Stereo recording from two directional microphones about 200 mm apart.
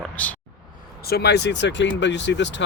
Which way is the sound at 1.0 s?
55° left (ahead or behind).